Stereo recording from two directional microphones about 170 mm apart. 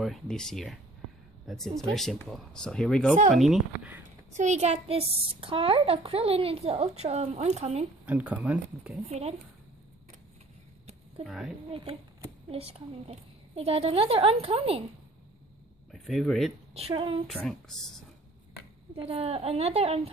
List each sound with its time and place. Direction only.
0.0 s speech: centre (ahead or behind)
4.3 s a child's voice: 45° right (ahead or behind)
8.0 s speech: 10° right (ahead or behind)
11.2 s speech: centre (ahead or behind)
11.7 s a child's voice: 30° right (ahead or behind)
15.9 s speech: centre (ahead or behind)
16.7 s a child's voice: 35° right (ahead or behind)
17.3 s speech: centre (ahead or behind)
18.9 s a child's voice: 35° right (ahead or behind)